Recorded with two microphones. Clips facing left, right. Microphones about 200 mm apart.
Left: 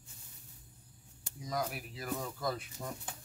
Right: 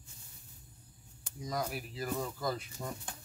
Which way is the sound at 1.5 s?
Centre (ahead or behind).